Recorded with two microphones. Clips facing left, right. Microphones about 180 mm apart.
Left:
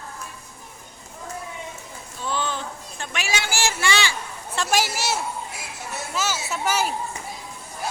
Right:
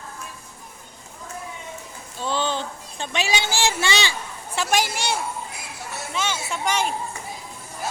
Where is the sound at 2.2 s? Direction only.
30° right (ahead or behind).